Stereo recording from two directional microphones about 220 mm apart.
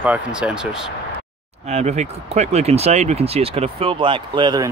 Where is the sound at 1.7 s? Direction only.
30° right (ahead or behind).